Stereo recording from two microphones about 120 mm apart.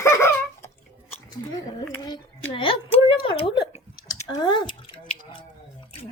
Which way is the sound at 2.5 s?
50° left (ahead or behind).